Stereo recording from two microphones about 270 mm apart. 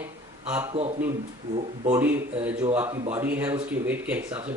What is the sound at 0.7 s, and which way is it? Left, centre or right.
Speech, right.